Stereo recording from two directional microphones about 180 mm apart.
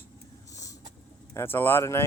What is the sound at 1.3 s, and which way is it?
Speech, 10° left (ahead or behind).